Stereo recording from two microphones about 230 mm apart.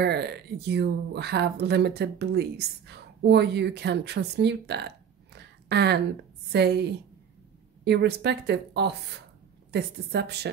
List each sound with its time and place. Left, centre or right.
0.0 s speech: right